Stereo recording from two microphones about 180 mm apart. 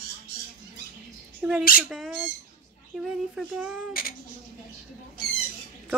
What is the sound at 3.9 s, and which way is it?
Speech, 55° left (ahead or behind).